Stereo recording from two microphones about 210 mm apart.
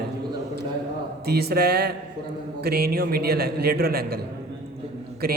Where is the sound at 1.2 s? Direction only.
50° right (ahead or behind).